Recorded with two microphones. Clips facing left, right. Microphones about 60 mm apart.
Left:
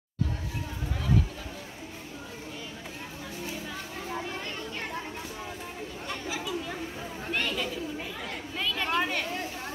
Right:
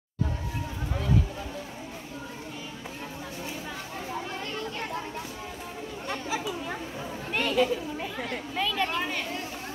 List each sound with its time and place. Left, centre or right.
6.0 s chatter: centre
7.3 s chatter: centre
8.5 s a sound: centre